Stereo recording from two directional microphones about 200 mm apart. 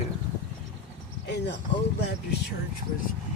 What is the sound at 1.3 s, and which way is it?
Speech, 60° left (ahead or behind).